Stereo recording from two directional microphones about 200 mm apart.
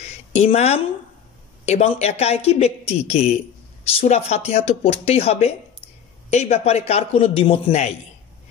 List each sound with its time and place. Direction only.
0.3 s speech: 30° left (ahead or behind)